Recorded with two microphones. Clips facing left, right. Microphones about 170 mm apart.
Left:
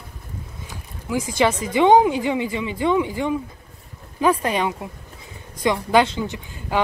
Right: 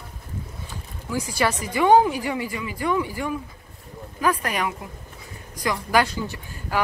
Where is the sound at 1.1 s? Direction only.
20° left (ahead or behind).